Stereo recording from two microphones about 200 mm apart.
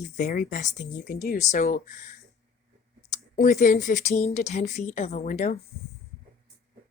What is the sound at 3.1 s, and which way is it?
Speech, 40° left (ahead or behind).